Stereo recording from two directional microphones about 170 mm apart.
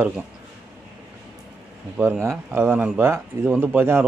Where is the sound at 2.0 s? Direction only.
15° right (ahead or behind).